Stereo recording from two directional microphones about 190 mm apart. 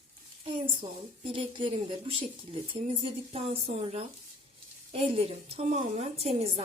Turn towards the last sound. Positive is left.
turn(degrees=-30)  # may be behind; listen again after turning